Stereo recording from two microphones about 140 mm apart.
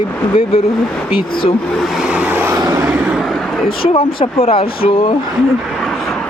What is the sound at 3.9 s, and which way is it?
Speech, 45° left (ahead or behind).